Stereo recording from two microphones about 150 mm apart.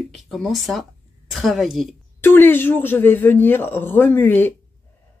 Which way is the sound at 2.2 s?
15° left (ahead or behind).